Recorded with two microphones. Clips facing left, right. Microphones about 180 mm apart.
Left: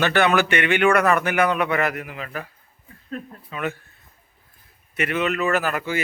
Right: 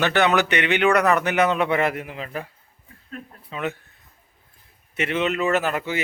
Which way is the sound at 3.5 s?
20° right (ahead or behind).